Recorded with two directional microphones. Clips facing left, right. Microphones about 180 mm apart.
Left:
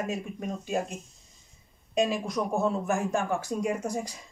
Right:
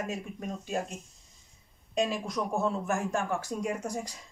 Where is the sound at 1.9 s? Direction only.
15° left (ahead or behind).